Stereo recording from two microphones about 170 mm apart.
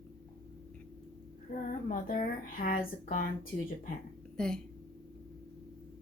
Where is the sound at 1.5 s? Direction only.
60° left (ahead or behind).